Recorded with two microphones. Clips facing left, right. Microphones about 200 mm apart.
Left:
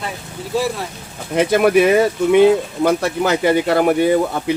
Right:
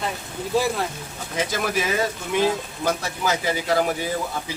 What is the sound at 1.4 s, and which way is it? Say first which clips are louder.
Speech: left 12 dB; 60° left (ahead or behind).